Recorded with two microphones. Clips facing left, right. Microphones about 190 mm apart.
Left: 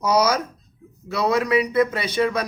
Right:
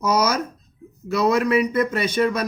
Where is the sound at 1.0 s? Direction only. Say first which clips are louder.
Right 2 dB; 45° right (ahead or behind).